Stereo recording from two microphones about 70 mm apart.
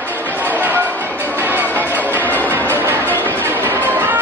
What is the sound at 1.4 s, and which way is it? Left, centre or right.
Music, right.